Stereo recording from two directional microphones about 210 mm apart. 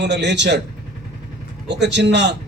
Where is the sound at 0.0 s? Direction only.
55° right (ahead or behind).